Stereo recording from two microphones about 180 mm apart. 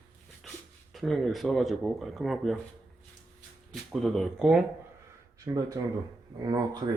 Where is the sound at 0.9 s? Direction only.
Centre (ahead or behind).